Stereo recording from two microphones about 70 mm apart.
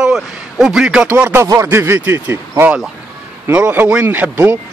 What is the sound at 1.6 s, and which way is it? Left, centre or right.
Speech, right.